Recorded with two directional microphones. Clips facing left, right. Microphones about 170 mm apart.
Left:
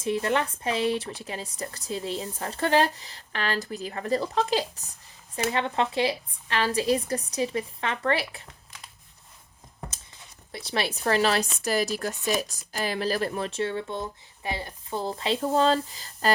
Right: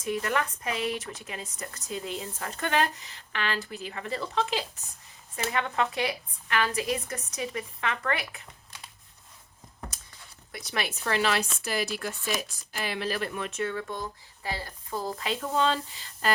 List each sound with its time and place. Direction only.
0.0 s speech: 30° left (ahead or behind)
9.9 s speech: 25° left (ahead or behind)